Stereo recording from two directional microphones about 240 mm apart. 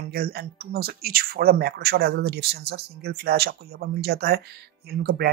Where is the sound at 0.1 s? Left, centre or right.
Right.